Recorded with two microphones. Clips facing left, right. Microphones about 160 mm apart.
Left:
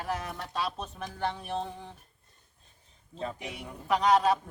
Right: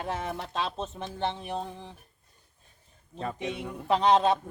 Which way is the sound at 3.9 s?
30° right (ahead or behind).